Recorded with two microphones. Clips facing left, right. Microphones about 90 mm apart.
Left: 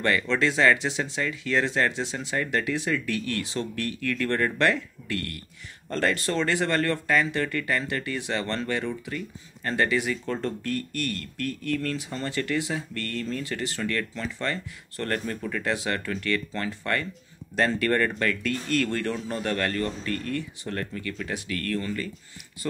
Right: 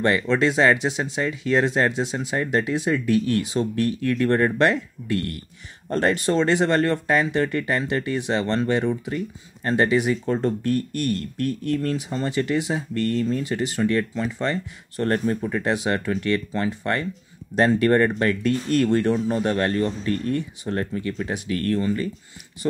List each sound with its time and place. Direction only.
0.0 s speech: 20° right (ahead or behind)